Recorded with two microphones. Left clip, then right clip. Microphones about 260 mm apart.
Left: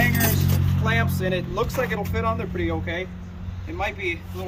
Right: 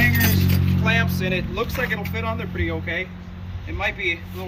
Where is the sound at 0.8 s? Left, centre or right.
Left.